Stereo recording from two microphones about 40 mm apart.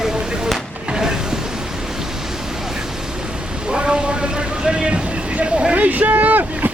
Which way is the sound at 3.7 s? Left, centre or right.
Right.